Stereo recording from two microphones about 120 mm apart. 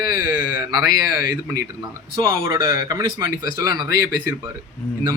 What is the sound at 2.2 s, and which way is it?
Speech, 45° right (ahead or behind).